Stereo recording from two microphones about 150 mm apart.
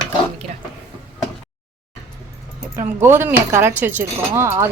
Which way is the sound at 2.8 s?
15° right (ahead or behind).